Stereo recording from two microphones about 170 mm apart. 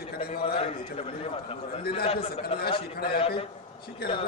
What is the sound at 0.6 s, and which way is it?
Speech, 35° left (ahead or behind).